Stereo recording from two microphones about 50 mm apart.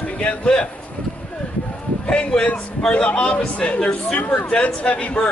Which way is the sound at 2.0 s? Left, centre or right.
Centre.